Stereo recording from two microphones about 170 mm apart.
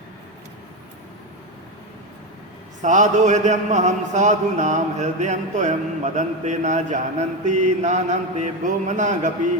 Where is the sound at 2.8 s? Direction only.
45° right (ahead or behind).